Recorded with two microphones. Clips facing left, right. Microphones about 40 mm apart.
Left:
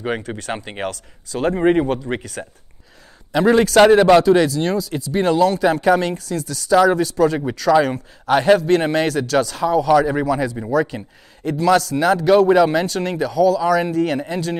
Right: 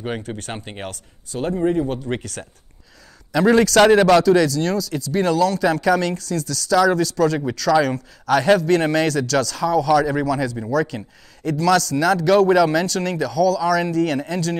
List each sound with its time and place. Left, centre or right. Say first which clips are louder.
0.3 s a man's voice: left 1 dB; centre
1.4 s speech: left 4 dB; left
2.4 s speech: left 4 dB; centre
3.3 s a man's voice: left 1 dB; left
4.2 s speech: left 1 dB; left